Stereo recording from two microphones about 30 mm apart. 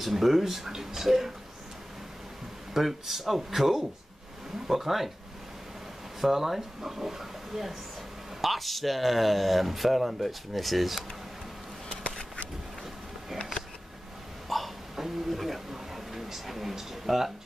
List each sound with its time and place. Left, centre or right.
0.0 s speech: centre
0.7 s speech: centre
1.0 s speech: centre
2.7 s speech: centre
6.2 s speech: centre
14.5 s hiccup: centre
15.0 s a sound: centre